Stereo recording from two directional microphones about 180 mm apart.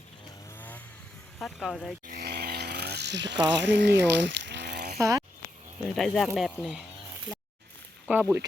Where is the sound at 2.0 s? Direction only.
60° right (ahead or behind).